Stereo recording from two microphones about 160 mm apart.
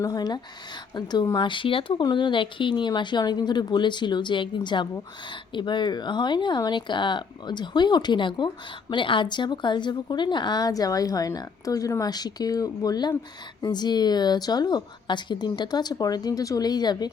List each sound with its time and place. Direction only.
0.0 s a woman's voice: 25° left (ahead or behind)